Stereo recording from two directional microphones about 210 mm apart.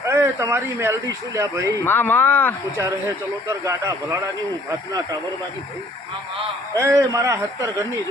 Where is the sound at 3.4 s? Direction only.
15° right (ahead or behind).